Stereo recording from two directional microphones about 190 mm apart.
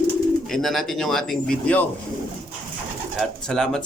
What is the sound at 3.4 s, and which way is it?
Speech, 5° left (ahead or behind).